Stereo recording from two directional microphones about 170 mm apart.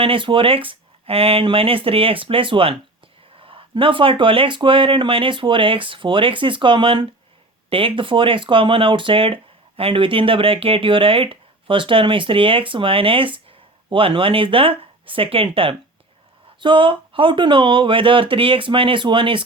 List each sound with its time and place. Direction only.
0.0 s speech: 30° right (ahead or behind)